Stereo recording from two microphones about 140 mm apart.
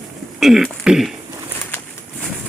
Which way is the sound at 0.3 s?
Centre (ahead or behind).